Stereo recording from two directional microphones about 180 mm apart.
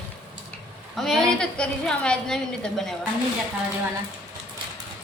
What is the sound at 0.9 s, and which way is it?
A man's voice, centre (ahead or behind).